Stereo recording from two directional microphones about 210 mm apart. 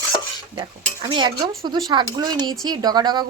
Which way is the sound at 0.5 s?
20° right (ahead or behind).